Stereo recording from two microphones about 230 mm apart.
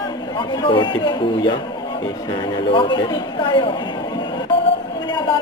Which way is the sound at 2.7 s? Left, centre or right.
Left.